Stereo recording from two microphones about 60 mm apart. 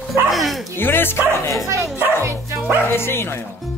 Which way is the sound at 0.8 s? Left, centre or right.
Left.